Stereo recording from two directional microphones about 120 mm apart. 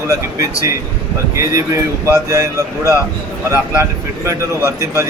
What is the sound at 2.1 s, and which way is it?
Speech, 25° right (ahead or behind).